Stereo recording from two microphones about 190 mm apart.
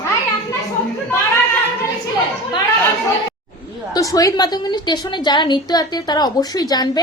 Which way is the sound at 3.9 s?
20° left (ahead or behind).